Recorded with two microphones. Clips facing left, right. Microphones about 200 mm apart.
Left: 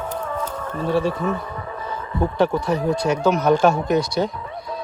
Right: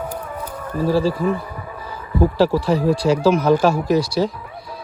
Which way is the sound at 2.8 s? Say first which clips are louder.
Right 3 dB; 30° right (ahead or behind).